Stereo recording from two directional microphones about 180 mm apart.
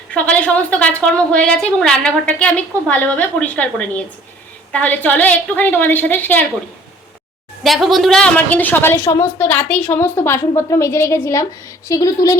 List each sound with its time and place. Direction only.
0.1 s a woman's voice: 5° left (ahead or behind)
7.6 s a woman's voice: centre (ahead or behind); by 12.4 s 20° left (ahead or behind)